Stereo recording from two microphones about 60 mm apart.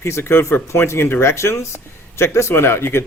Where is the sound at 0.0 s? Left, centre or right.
Left.